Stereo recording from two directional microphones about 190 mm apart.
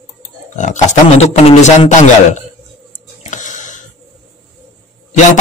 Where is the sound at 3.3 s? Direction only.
40° left (ahead or behind).